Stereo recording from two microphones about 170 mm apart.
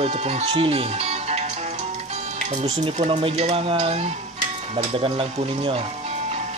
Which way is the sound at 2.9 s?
40° right (ahead or behind).